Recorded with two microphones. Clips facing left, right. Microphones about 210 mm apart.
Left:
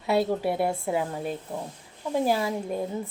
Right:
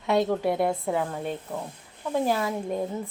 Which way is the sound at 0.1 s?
5° left (ahead or behind).